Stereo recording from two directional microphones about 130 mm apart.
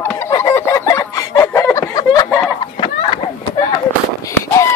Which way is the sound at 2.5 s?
45° left (ahead or behind).